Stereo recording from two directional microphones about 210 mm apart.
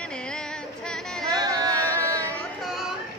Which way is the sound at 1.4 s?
20° right (ahead or behind).